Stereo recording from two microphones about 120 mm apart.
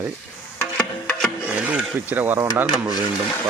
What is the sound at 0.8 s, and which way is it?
Music, 10° left (ahead or behind).